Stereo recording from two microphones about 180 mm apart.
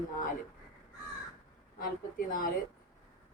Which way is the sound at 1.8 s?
50° left (ahead or behind).